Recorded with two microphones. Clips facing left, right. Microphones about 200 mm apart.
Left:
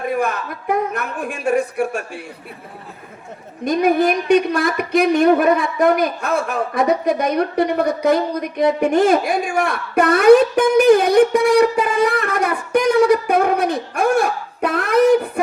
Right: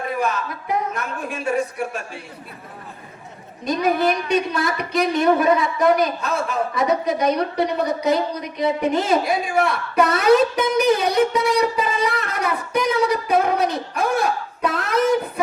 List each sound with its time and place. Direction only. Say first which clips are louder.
0.2 s speech: left 2 dB; 50° left (ahead or behind)
3.6 s a man's voice: left 4 dB; 50° left (ahead or behind)